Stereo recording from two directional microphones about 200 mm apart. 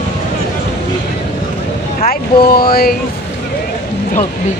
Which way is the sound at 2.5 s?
50° left (ahead or behind).